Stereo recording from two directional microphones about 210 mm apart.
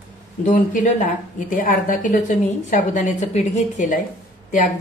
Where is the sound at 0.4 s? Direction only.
35° left (ahead or behind).